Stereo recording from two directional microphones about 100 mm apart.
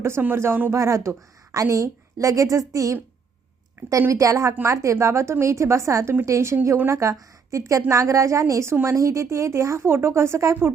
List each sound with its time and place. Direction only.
0.0 s a woman's voice: 25° right (ahead or behind)